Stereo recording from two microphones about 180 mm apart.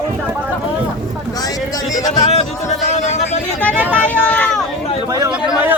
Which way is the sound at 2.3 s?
35° left (ahead or behind).